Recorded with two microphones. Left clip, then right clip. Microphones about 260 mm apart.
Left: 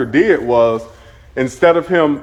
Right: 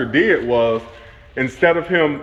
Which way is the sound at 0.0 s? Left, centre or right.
Left.